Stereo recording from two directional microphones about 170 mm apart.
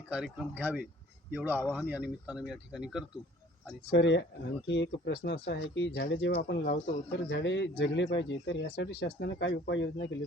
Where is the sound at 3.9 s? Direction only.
90° left.